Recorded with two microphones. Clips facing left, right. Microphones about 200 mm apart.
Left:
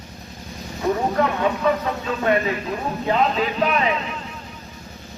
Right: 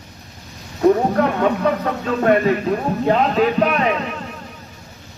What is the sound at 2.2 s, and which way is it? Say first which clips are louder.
A man's voice: right 6 dB; 50° right (ahead or behind).